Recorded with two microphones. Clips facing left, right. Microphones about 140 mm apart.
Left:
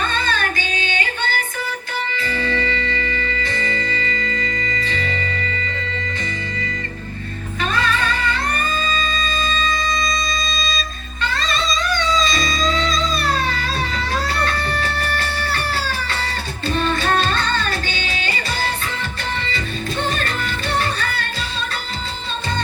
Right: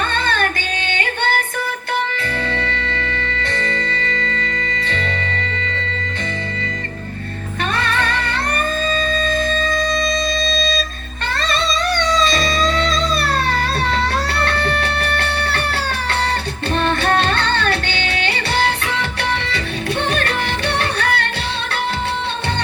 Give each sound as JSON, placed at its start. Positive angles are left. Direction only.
{"t": 0.1, "sound": "music", "side_deg": -60}
{"t": 7.7, "sound": "music", "side_deg": -60}